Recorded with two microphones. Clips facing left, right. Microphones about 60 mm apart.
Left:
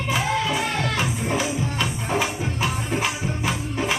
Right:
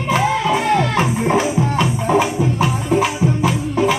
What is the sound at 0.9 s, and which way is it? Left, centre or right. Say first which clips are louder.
Music: right 8 dB; right.